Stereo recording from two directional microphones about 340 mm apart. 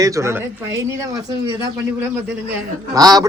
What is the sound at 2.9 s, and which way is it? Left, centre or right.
Speech, centre.